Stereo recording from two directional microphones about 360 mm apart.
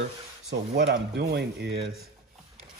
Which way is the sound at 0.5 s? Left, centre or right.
Right.